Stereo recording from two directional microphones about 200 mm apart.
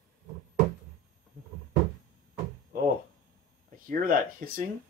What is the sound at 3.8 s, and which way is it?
Speech, 45° right (ahead or behind).